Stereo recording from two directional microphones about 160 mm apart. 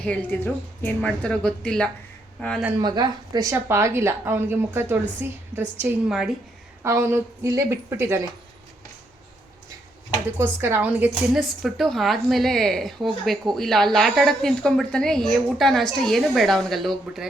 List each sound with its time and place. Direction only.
0.0 s a woman's voice: 10° left (ahead or behind)
2.8 s a woman's voice: 25° right (ahead or behind)
6.1 s a woman's voice: centre (ahead or behind)
6.8 s a woman's voice: 15° right (ahead or behind)
10.3 s a woman's voice: 15° right (ahead or behind); by 17.2 s centre (ahead or behind)